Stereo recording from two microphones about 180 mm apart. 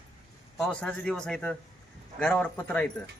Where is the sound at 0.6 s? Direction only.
5° left (ahead or behind).